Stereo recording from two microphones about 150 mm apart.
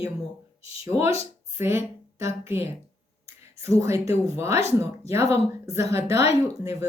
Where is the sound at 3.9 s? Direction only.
40° left (ahead or behind).